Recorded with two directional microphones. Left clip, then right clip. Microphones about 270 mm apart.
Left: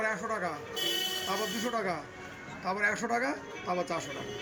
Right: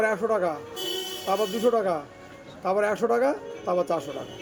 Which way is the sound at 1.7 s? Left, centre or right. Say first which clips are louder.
Right 8 dB; right.